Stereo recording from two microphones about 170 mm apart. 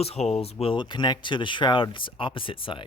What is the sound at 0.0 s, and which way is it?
Speech, 35° left (ahead or behind).